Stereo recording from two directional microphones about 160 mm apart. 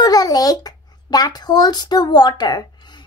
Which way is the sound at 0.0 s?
25° left (ahead or behind).